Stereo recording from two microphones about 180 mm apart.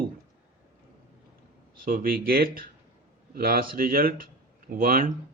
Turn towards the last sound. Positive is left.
turn(degrees=-50)  # may be behind; listen again after turning